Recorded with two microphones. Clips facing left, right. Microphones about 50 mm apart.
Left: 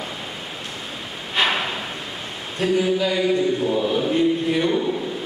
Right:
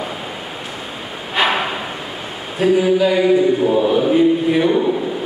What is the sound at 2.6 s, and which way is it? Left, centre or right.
Chant, centre.